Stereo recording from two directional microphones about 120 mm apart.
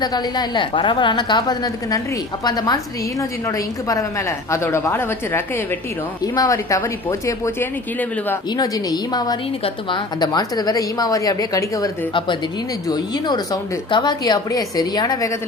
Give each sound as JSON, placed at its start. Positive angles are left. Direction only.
{"t": 0.0, "sound": "speech", "side_deg": 35}
{"t": 4.5, "sound": "speech", "side_deg": 20}
{"t": 12.9, "sound": "speech", "side_deg": 35}